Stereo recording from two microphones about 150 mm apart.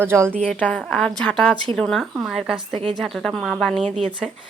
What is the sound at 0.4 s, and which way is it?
A woman's voice, 10° left (ahead or behind).